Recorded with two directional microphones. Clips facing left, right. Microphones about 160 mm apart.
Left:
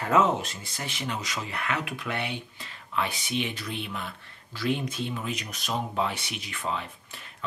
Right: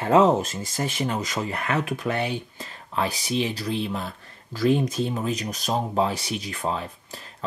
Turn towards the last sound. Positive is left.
turn(degrees=-35)  # may be behind; listen again after turning